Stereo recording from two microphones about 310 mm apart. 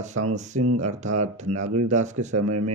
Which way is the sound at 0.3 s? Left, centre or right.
Right.